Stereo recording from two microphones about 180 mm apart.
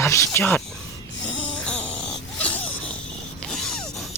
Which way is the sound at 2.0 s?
5° left (ahead or behind).